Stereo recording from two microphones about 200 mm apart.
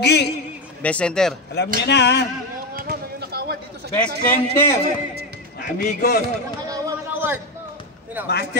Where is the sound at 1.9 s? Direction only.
60° left (ahead or behind).